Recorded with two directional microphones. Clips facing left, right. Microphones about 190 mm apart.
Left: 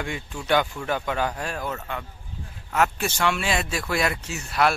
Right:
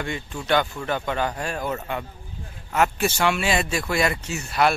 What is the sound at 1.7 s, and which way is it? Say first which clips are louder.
Speech: right 4 dB; 20° right (ahead or behind).